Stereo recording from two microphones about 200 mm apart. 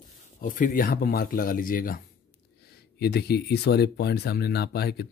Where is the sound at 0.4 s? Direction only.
45° left (ahead or behind).